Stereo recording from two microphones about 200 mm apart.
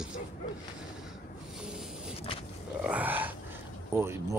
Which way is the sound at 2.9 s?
10° right (ahead or behind).